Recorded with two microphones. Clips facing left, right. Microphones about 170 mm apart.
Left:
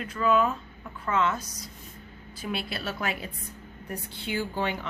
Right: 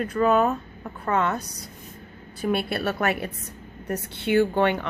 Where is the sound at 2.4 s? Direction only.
55° right (ahead or behind).